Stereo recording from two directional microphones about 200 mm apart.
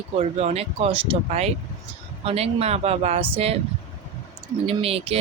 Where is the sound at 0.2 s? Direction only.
30° right (ahead or behind).